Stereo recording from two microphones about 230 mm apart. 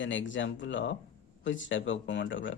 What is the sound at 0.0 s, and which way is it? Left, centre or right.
Speech, left.